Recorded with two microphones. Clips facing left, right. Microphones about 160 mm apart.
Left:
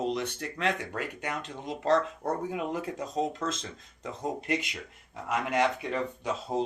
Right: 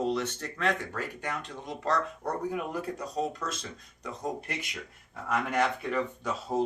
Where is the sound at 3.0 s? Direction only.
25° left (ahead or behind).